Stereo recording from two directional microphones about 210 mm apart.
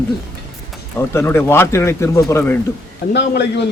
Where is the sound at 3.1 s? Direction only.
55° left (ahead or behind).